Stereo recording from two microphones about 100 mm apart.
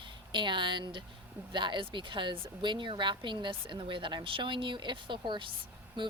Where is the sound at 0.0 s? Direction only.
55° right (ahead or behind).